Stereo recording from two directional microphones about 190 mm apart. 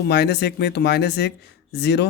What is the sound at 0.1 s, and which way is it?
Speech, 60° left (ahead or behind).